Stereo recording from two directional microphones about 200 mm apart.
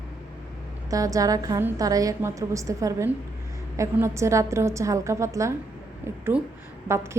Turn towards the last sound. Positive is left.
turn(degrees=-15)  # may be behind; listen again after turning